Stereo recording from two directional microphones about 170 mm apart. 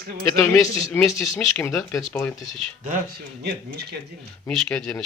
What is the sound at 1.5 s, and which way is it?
Speech, 15° left (ahead or behind).